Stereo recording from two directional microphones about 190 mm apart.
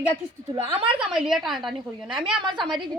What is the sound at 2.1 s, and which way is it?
Speech, 25° right (ahead or behind).